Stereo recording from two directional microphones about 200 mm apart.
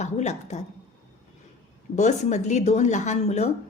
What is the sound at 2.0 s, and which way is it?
A woman's voice, 35° left (ahead or behind).